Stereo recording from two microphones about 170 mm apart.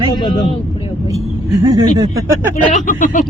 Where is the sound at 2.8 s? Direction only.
50° left (ahead or behind).